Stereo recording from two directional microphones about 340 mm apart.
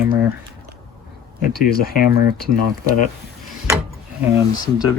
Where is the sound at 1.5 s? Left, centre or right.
Left.